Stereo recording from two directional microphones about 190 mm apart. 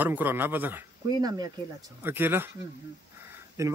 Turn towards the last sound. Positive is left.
turn(degrees=-15)  # may be behind; listen again after turning